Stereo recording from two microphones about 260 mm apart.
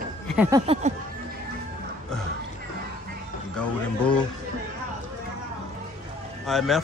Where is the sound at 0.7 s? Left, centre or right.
Right.